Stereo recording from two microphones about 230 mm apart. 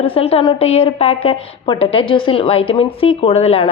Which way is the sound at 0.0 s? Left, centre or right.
Left.